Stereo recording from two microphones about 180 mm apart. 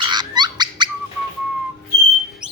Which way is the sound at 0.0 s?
25° right (ahead or behind).